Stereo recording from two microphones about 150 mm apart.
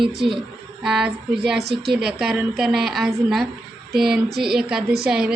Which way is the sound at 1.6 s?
90° right.